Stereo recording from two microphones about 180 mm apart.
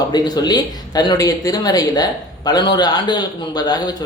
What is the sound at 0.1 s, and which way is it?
A man's voice, 20° left (ahead or behind).